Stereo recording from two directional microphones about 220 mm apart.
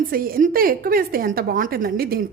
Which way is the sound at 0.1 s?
40° right (ahead or behind).